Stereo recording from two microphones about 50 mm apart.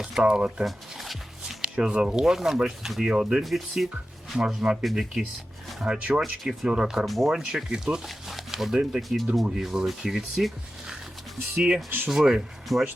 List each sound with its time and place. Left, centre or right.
0.2 s speech: centre
0.6 s music: centre
1.6 s speech: centre
3.4 s speech: centre
4.4 s speech: centre
4.8 s speech: centre
5.8 s speech: right
6.4 s speech: centre
6.7 s speech: centre
7.0 s speech: centre
8.0 s a sound: centre
9.0 s speech: centre
12.0 s speech: centre
12.7 s speech: centre